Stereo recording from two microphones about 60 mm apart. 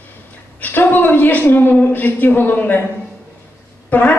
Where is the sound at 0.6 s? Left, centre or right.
Left.